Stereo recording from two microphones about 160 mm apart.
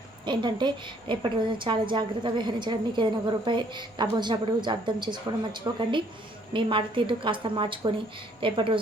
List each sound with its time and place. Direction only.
0.3 s a woman's voice: 30° right (ahead or behind)